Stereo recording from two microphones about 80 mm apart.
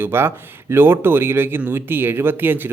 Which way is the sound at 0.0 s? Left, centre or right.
Right.